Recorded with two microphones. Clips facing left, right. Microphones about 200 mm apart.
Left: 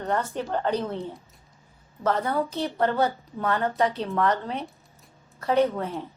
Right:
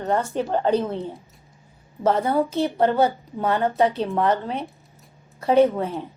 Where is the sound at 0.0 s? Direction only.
25° right (ahead or behind).